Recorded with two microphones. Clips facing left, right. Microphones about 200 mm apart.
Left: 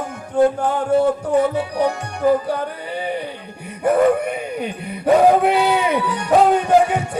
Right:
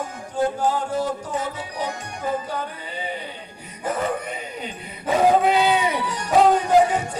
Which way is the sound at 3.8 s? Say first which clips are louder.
Left 10 dB; 60° left (ahead or behind).